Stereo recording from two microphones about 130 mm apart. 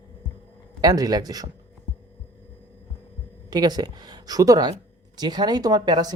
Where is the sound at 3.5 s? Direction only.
30° right (ahead or behind).